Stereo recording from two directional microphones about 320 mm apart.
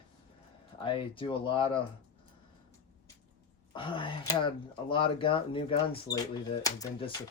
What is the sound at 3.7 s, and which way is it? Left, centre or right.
Speech, centre.